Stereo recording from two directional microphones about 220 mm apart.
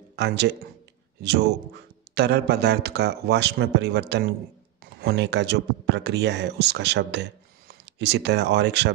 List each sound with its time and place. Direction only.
0.1 s speech: 50° right (ahead or behind)